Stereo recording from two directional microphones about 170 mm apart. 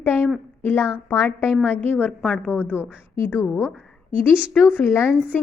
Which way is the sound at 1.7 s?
10° left (ahead or behind).